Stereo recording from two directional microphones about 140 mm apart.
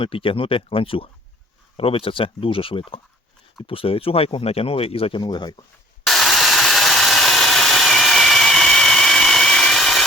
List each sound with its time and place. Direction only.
0.0 s speech: 40° left (ahead or behind)
6.1 s tools: centre (ahead or behind)